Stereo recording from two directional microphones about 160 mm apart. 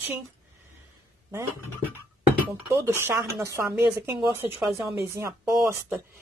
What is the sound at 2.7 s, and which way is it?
Speech, 15° right (ahead or behind).